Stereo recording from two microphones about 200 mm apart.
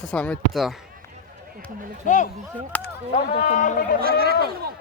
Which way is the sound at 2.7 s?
10° left (ahead or behind).